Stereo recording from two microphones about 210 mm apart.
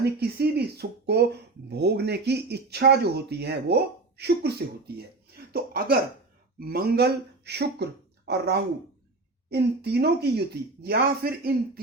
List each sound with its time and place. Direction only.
0.0 s speech: 50° right (ahead or behind)
5.5 s speech: 45° right (ahead or behind)